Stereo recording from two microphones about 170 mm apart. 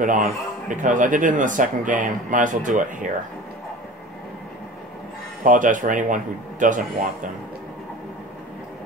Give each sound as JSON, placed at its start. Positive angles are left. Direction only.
{"t": 0.0, "sound": "a man's voice", "side_deg": -50}
{"t": 5.4, "sound": "a man's voice", "side_deg": -50}